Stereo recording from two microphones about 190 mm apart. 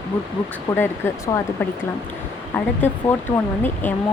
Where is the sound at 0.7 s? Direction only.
10° left (ahead or behind).